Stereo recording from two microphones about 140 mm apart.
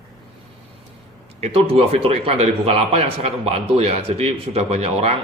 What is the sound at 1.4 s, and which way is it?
A man's voice, 40° right (ahead or behind).